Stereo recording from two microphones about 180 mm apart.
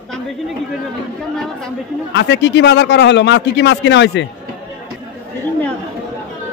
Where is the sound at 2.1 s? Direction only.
75° left (ahead or behind).